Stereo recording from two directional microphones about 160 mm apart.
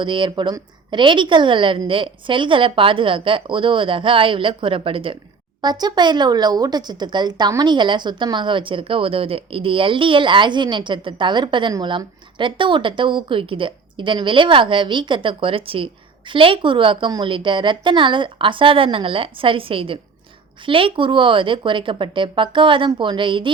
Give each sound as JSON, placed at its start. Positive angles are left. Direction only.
{"t": 0.0, "sound": "speech", "side_deg": -30}